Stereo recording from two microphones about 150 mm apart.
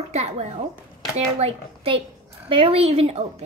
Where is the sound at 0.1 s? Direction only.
45° right (ahead or behind).